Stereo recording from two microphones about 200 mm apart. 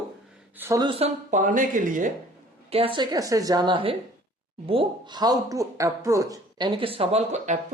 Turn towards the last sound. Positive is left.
turn(degrees=-35)  # may be behind; listen again after turning